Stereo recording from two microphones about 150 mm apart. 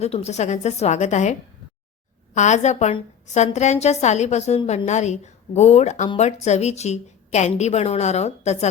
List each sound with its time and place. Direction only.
0.0 s a woman's voice: 45° left (ahead or behind)